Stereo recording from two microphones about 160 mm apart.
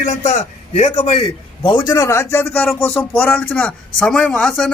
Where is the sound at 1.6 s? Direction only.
25° left (ahead or behind).